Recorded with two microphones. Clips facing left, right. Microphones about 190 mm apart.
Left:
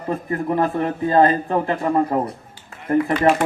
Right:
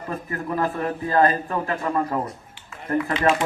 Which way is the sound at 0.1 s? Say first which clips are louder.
Left 6 dB; 25° left (ahead or behind).